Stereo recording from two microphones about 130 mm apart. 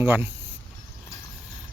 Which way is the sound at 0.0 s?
15° right (ahead or behind).